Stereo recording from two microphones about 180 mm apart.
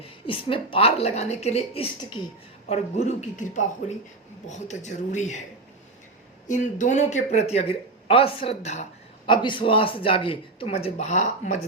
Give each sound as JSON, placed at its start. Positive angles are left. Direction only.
{"t": 0.0, "sound": "speech", "side_deg": 30}
{"t": 6.5, "sound": "speech", "side_deg": 45}
{"t": 9.3, "sound": "speech", "side_deg": 25}